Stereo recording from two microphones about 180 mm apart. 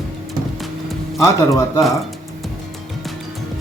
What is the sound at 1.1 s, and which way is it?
Speech, 15° left (ahead or behind).